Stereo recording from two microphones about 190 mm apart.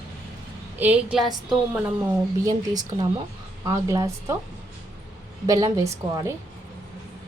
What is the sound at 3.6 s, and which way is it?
Speech, 20° right (ahead or behind).